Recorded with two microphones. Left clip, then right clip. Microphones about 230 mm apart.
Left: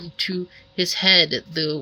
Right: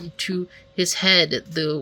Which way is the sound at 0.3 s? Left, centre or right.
Centre.